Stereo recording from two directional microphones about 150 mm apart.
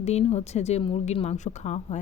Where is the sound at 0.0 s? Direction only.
45° left (ahead or behind).